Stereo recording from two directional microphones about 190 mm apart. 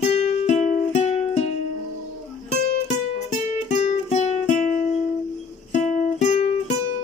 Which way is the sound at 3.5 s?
40° left (ahead or behind).